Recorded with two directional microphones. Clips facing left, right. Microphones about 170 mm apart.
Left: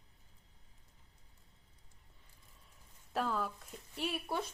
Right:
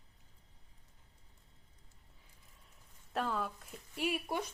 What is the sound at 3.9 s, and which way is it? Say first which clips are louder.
Speech: right 2 dB; 10° right (ahead or behind).